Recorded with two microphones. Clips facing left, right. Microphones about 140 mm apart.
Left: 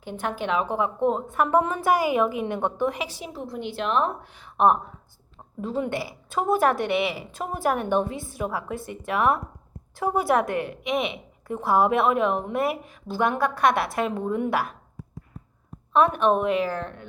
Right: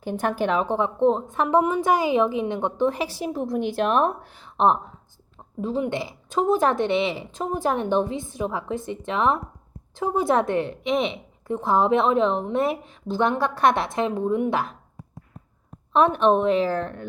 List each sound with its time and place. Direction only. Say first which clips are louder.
0.2 s a woman's voice: right 3 dB; 40° right (ahead or behind); by 2.9 s 20° right (ahead or behind)
2.9 s a woman's voice: right 4 dB; 35° right (ahead or behind)
3.2 s a woman's voice: right 7 dB; 50° right (ahead or behind)
4.4 s speech: left 1 dB; 30° right (ahead or behind)
5.5 s a woman's voice: right 2 dB; 20° right (ahead or behind)
15.9 s a woman's voice: right 2 dB; 30° right (ahead or behind)